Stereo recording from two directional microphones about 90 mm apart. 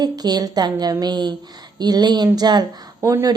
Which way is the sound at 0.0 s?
50° right (ahead or behind).